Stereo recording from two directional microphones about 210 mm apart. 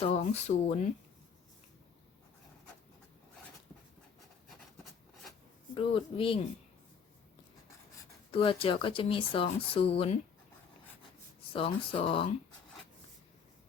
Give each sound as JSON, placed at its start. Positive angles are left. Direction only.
{"t": 0.0, "sound": "speech", "side_deg": 30}
{"t": 5.7, "sound": "speech", "side_deg": 25}
{"t": 8.3, "sound": "speech", "side_deg": 25}
{"t": 11.5, "sound": "speech", "side_deg": 25}